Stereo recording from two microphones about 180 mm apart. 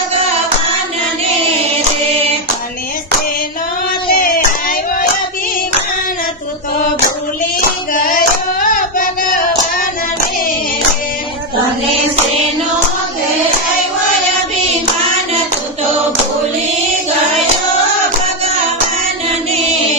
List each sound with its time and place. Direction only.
4.1 s child singing: 50° left (ahead or behind)
7.6 s female singing: 50° left (ahead or behind)
8.7 s a sound: 50° left (ahead or behind)